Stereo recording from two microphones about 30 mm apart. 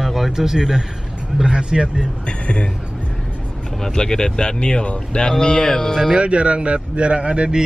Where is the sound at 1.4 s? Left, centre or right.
Right.